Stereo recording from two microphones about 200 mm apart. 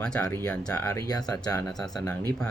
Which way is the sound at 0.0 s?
5° left (ahead or behind).